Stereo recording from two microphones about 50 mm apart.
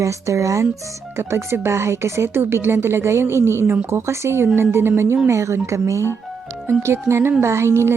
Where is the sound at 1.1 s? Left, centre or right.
Right.